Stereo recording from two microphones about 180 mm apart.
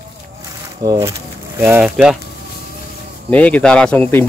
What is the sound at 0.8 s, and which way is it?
Speech, 20° right (ahead or behind).